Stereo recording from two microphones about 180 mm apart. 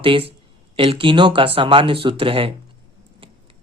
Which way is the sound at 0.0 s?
30° right (ahead or behind).